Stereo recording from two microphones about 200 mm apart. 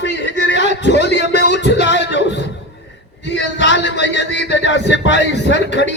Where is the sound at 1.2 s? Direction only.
35° right (ahead or behind).